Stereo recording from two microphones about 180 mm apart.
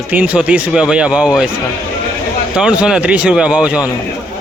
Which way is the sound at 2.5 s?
5° right (ahead or behind).